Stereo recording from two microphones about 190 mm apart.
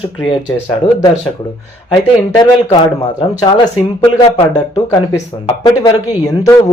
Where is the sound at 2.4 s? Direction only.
25° left (ahead or behind).